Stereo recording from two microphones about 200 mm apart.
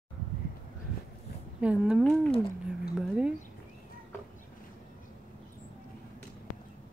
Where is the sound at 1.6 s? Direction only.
5° right (ahead or behind).